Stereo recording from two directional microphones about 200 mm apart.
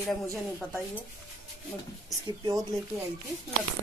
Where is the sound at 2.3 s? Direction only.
20° right (ahead or behind).